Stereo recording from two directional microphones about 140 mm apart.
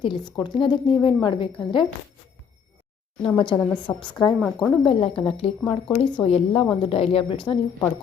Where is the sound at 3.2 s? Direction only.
35° left (ahead or behind).